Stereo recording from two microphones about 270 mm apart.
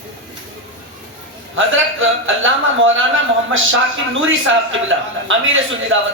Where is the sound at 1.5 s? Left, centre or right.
Right.